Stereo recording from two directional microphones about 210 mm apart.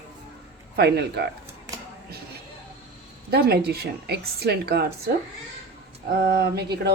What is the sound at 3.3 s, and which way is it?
Speech, 50° right (ahead or behind).